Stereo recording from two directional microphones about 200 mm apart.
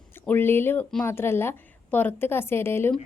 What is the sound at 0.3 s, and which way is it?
A woman's voice, 10° left (ahead or behind).